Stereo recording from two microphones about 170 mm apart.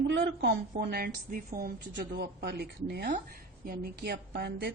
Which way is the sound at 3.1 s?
55° right (ahead or behind).